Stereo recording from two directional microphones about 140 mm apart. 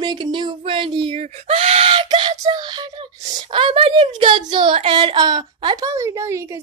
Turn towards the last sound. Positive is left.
turn(degrees=-20)  # may be behind; listen again after turning